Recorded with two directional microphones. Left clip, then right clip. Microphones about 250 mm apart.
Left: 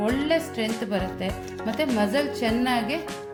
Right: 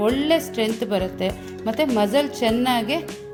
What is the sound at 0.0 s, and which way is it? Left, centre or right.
Speech, right.